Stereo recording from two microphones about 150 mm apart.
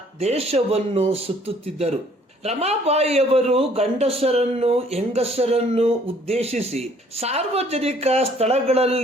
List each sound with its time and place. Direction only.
0.2 s a man's voice: 45° right (ahead or behind)